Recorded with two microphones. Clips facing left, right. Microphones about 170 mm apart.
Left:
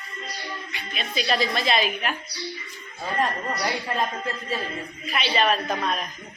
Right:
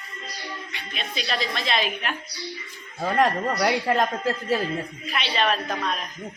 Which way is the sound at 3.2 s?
80° right.